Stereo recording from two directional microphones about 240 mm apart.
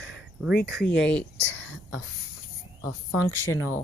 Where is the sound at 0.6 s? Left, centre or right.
Centre.